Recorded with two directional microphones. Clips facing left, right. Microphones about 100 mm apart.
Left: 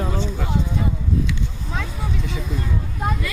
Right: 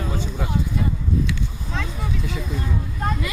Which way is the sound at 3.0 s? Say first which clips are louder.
Left 1 dB; 5° left (ahead or behind).